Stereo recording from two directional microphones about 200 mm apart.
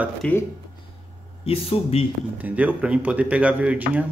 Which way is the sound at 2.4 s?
5° right (ahead or behind).